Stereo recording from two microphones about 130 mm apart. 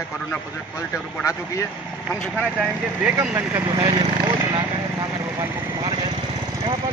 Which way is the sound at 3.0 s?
10° right (ahead or behind).